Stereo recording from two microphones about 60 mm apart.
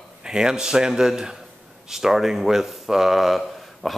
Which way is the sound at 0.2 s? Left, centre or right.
Centre.